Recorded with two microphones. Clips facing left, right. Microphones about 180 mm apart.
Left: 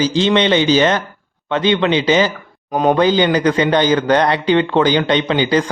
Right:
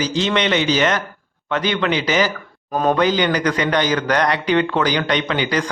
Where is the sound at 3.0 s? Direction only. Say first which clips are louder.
Left 4 dB; 30° left (ahead or behind).